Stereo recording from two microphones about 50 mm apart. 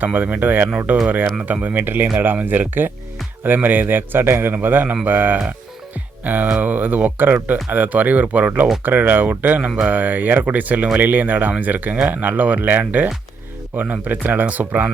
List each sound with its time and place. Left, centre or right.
0.0 s a man's voice: right